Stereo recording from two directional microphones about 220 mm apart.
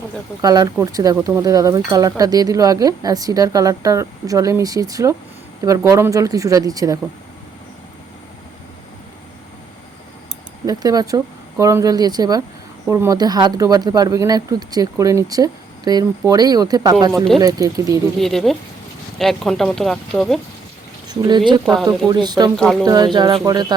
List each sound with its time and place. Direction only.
0.4 s speech: 15° right (ahead or behind)
10.7 s speech: 15° right (ahead or behind)
18.2 s speech: centre (ahead or behind)
21.1 s speech: 20° right (ahead or behind)
22.5 s speech: centre (ahead or behind)
22.8 s speech: 20° right (ahead or behind)